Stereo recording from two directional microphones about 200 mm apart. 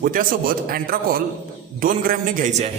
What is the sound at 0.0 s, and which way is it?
A man's voice, 45° right (ahead or behind).